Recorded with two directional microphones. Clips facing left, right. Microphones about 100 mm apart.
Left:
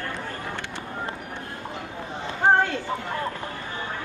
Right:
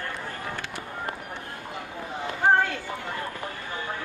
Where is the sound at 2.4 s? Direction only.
25° left (ahead or behind).